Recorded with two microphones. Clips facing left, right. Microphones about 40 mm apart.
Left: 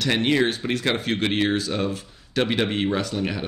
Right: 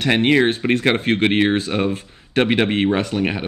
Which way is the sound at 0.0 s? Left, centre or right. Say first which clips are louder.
Right 5 dB; right.